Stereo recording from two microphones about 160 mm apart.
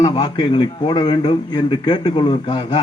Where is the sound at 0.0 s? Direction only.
25° left (ahead or behind).